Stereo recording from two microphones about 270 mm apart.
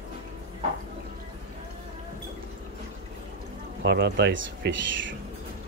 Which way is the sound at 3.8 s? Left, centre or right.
Right.